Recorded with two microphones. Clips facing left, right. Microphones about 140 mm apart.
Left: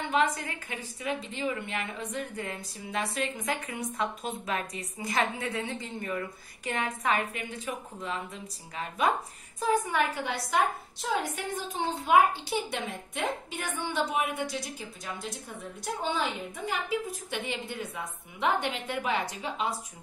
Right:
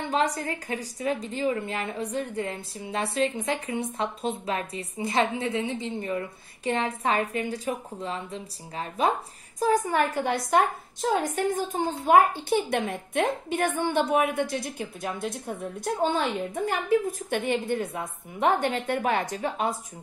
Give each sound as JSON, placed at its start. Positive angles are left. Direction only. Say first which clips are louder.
{"t": 0.1, "sound": "a woman's voice", "louder": "right 1 dB", "side_deg": -35}
{"t": 12.4, "sound": "a woman's voice", "louder": "right 7 dB", "side_deg": -55}